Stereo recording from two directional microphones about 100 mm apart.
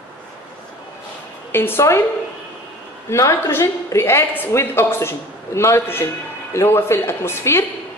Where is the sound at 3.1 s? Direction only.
30° left (ahead or behind).